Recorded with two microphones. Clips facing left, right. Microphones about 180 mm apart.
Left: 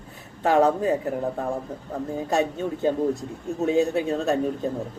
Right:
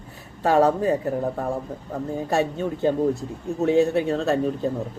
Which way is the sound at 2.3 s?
20° left (ahead or behind).